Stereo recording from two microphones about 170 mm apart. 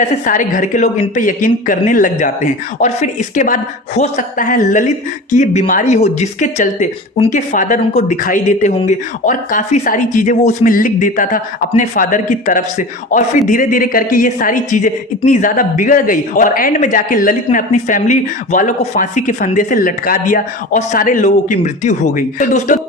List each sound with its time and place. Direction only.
0.0 s speech: 50° left (ahead or behind)